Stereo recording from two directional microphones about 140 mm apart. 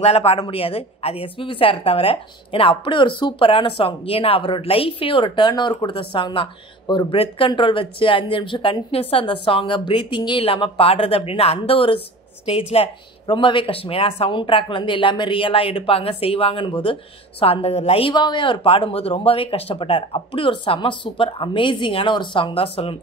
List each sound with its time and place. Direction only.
0.0 s speech: 45° left (ahead or behind)